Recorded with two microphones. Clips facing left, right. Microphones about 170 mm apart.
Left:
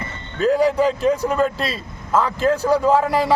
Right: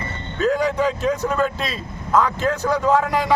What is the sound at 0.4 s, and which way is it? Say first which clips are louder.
Speech: left 3 dB; 35° left (ahead or behind).